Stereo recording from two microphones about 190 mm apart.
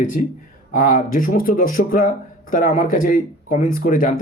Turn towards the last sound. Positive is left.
turn(degrees=45)  # may be behind; listen again after turning